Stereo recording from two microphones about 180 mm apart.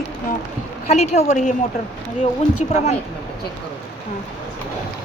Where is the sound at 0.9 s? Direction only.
40° left (ahead or behind).